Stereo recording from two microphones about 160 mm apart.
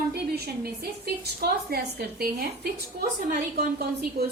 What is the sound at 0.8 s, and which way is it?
A woman's voice, 80° right.